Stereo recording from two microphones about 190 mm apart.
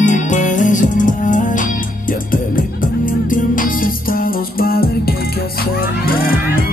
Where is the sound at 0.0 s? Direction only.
40° left (ahead or behind).